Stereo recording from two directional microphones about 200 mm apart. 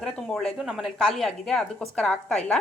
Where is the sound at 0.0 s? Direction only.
Centre (ahead or behind).